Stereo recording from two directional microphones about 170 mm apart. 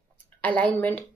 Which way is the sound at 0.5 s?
10° left (ahead or behind).